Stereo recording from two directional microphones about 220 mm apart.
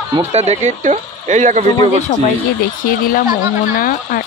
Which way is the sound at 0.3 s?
30° right (ahead or behind).